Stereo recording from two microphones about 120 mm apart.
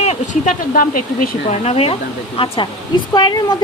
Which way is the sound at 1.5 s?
60° left (ahead or behind).